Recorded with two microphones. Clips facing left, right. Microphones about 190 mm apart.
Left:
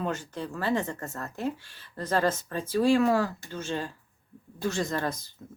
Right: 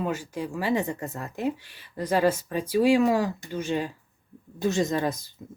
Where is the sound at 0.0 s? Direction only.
10° right (ahead or behind).